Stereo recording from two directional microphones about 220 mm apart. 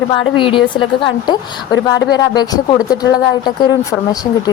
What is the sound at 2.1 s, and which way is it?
A woman's voice, 20° left (ahead or behind).